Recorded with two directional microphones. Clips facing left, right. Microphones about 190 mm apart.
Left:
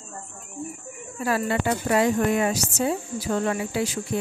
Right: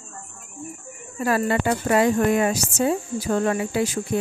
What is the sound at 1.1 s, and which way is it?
Speech, 50° right (ahead or behind).